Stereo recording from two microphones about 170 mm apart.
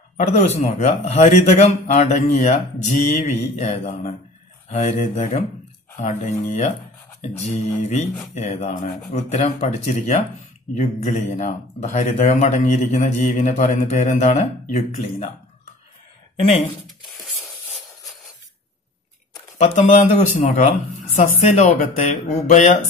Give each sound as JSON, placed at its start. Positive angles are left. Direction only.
{"t": 0.3, "sound": "speech", "side_deg": 40}
{"t": 19.6, "sound": "speech", "side_deg": 45}